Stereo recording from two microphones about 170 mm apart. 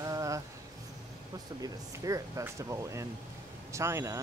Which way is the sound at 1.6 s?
20° right (ahead or behind).